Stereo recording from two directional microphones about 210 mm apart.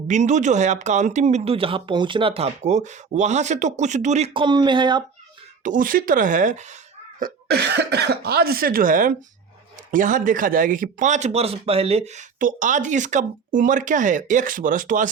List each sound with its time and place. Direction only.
0.1 s a man's voice: 35° right (ahead or behind)
5.6 s a man's voice: 40° right (ahead or behind)